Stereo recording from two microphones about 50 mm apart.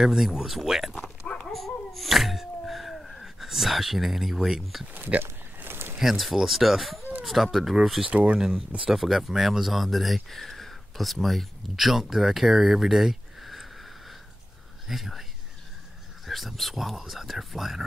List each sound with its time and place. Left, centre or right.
0.0 s speech: centre
1.2 s dog: left
1.5 s a sound: centre
5.2 s a sound: right
5.9 s speech: centre
8.0 s speech: right
8.4 s speech: centre
14.9 s speech: centre
16.3 s speech: centre